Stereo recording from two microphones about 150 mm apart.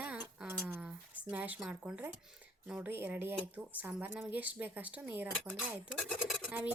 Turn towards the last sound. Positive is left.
turn(degrees=-10)  # may be behind; listen again after turning